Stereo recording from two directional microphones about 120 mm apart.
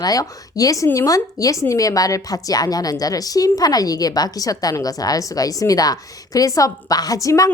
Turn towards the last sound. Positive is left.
turn(degrees=30)  # may be behind; listen again after turning